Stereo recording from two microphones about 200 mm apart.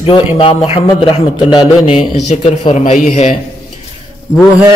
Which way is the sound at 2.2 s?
35° left (ahead or behind).